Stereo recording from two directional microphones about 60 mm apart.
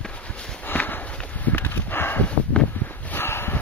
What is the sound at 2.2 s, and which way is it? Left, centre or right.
Dog, left.